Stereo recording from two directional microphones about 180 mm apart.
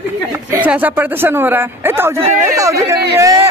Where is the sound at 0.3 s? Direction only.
10° right (ahead or behind).